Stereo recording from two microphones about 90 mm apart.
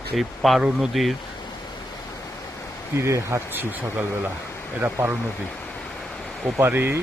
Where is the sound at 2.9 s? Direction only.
30° right (ahead or behind).